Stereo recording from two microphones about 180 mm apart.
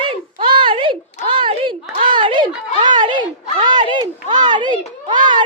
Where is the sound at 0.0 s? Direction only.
30° right (ahead or behind).